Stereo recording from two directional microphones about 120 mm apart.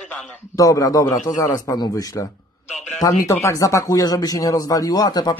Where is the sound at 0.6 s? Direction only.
30° left (ahead or behind).